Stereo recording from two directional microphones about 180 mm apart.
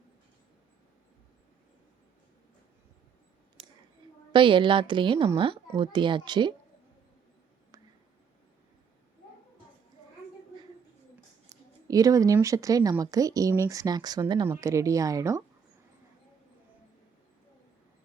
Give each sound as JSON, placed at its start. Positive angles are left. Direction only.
{"t": 4.3, "sound": "a woman's voice", "side_deg": -25}
{"t": 11.4, "sound": "a woman's voice", "side_deg": -20}